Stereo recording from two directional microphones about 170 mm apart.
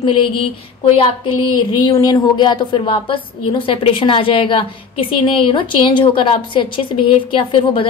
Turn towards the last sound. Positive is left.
turn(degrees=30)  # may be behind; listen again after turning